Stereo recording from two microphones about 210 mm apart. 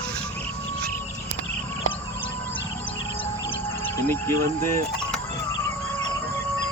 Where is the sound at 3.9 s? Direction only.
10° left (ahead or behind).